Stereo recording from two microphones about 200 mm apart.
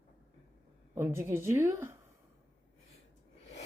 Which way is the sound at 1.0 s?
10° right (ahead or behind).